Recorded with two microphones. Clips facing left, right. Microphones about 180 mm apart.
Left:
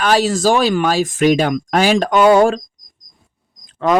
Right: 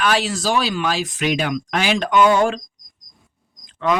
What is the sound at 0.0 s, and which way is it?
Speech, 40° left (ahead or behind).